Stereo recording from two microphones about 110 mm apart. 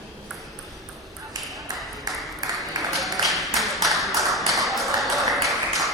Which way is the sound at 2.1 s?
30° right (ahead or behind).